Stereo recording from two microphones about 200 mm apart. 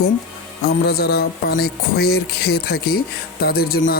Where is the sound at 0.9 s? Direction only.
50° left (ahead or behind).